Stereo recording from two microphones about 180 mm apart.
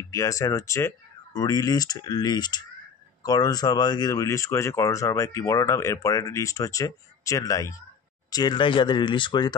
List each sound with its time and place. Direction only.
0.1 s speech: 20° left (ahead or behind)